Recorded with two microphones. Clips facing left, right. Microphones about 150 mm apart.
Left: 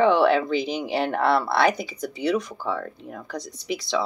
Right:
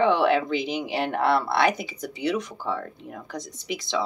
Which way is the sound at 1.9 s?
45° left (ahead or behind).